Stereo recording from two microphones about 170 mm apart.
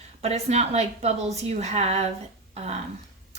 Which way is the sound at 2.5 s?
40° right (ahead or behind).